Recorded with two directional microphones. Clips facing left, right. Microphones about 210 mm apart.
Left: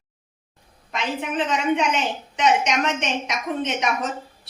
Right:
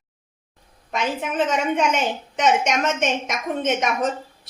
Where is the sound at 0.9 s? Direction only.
45° right (ahead or behind).